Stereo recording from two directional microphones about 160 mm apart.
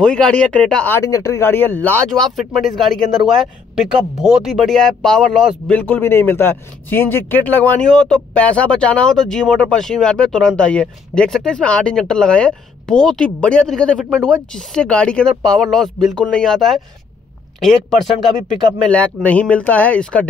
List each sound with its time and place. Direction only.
0.0 s a man's voice: 5° left (ahead or behind)
5.7 s a man's voice: 10° left (ahead or behind)